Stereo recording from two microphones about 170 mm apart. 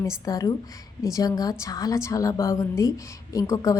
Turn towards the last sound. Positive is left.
turn(degrees=20)  # may be behind; listen again after turning